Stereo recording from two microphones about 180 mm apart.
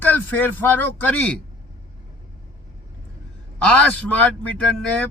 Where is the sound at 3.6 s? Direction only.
10° left (ahead or behind).